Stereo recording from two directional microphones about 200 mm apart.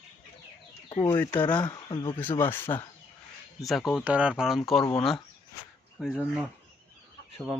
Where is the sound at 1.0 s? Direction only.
15° left (ahead or behind).